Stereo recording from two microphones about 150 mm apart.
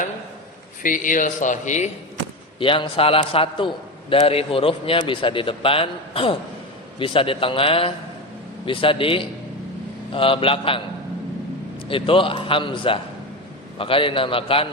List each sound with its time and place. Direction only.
0.8 s speech: 65° left (ahead or behind)
2.6 s a man's voice: 35° left (ahead or behind)
11.9 s a man's voice: 35° left (ahead or behind)